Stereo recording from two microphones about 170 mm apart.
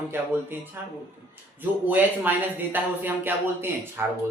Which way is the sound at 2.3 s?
10° right (ahead or behind).